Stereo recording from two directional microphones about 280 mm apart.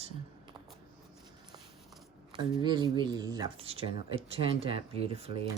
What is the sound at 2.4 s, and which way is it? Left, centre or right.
Speech, centre.